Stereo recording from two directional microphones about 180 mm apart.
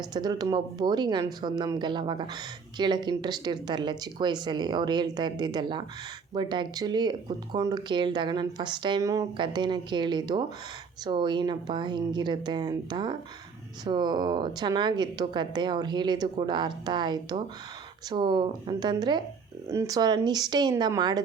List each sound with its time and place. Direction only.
0.1 s speech: 20° right (ahead or behind)